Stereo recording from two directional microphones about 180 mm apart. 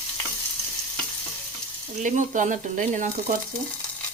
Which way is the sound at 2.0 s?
45° right (ahead or behind).